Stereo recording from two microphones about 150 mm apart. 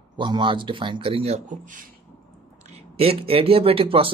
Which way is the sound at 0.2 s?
30° right (ahead or behind).